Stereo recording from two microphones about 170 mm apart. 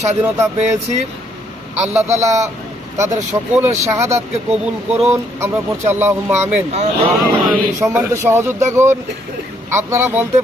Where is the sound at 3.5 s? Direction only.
15° right (ahead or behind).